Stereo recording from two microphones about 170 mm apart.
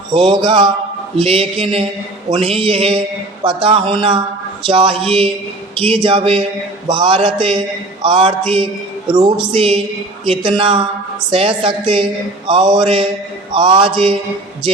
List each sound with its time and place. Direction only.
0.3 s mantra: 30° right (ahead or behind)
1.2 s a woman's voice: 35° right (ahead or behind)
12.5 s mantra: 30° right (ahead or behind)